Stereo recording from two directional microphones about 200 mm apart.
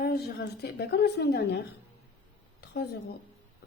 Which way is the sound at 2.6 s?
55° left (ahead or behind).